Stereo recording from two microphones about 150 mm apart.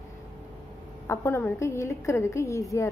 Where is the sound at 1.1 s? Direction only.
15° left (ahead or behind).